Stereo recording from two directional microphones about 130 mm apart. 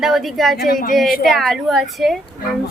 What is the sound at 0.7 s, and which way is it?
Speech, 90° left.